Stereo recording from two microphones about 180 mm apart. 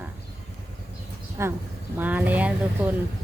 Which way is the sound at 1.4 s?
15° right (ahead or behind).